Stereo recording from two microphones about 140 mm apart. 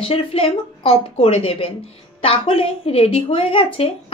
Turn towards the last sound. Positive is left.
turn(degrees=45)  # may be behind; listen again after turning